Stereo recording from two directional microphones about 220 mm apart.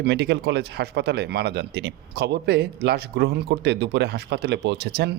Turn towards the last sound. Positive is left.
turn(degrees=-50)  # may be behind; listen again after turning